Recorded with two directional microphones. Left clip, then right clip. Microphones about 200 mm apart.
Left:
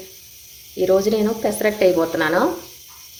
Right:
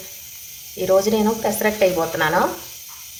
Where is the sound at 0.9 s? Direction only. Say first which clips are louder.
Right 1 dB; 35° left (ahead or behind).